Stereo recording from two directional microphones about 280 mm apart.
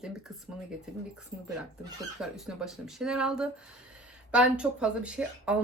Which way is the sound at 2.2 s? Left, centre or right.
Centre.